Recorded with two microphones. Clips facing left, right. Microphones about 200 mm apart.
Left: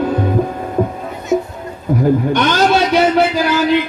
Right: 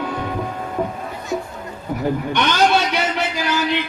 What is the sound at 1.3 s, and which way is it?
Music, 20° left (ahead or behind).